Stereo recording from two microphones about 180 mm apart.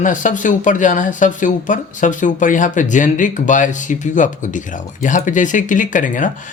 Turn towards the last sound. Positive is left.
turn(degrees=45)  # may be behind; listen again after turning